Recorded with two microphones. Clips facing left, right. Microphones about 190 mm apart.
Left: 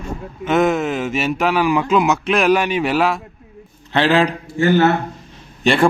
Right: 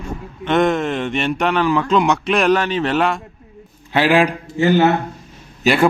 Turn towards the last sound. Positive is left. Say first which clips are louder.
# even
turn(degrees=-5)  # may be behind; listen again after turning